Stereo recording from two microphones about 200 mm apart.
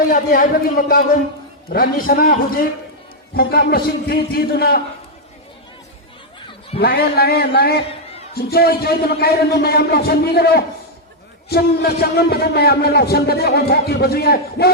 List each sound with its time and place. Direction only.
0.0 s a man's voice: 45° left (ahead or behind)
6.7 s a man's voice: 50° left (ahead or behind)